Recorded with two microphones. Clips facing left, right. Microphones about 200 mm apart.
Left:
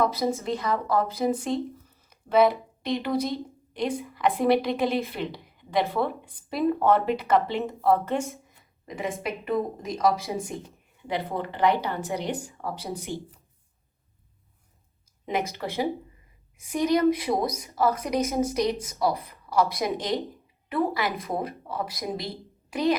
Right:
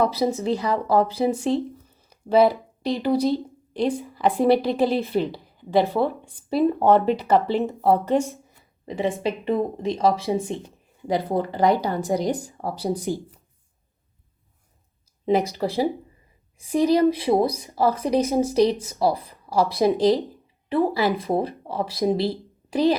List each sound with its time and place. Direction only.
0.0 s a woman's voice: 30° right (ahead or behind)
15.3 s a woman's voice: 35° right (ahead or behind)